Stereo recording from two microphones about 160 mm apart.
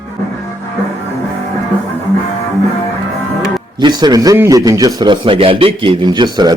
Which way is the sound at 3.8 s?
25° right (ahead or behind).